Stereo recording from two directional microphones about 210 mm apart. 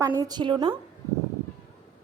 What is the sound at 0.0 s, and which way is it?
Speech, 15° right (ahead or behind).